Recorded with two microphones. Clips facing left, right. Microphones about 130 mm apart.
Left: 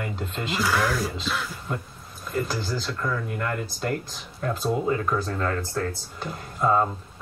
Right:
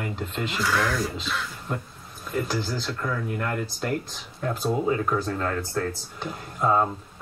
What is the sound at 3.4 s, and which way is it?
Speech, centre (ahead or behind).